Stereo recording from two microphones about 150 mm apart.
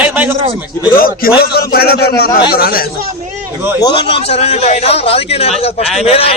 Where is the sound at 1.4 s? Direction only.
90° left.